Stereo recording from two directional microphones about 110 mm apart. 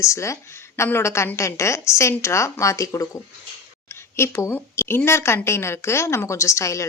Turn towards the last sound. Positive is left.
turn(degrees=25)  # may be behind; listen again after turning